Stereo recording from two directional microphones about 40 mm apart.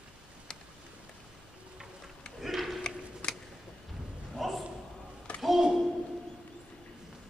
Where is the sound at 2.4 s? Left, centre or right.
Centre.